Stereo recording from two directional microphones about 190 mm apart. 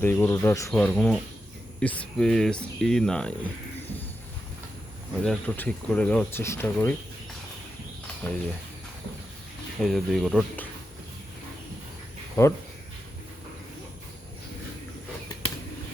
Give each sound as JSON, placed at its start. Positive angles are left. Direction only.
{"t": 0.0, "sound": "speech", "side_deg": 15}
{"t": 0.7, "sound": "speech", "side_deg": 5}
{"t": 5.2, "sound": "speech", "side_deg": 5}
{"t": 8.3, "sound": "speech", "side_deg": 10}
{"t": 9.8, "sound": "speech", "side_deg": 0}
{"t": 12.4, "sound": "speech", "side_deg": 15}